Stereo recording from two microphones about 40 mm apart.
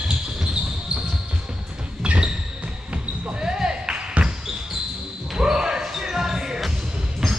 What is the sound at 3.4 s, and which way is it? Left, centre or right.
Basketball bounce, centre.